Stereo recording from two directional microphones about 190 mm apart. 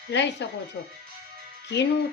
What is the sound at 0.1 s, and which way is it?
Speech, 65° left (ahead or behind).